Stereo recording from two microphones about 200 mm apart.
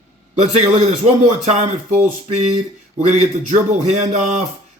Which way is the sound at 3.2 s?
35° right (ahead or behind).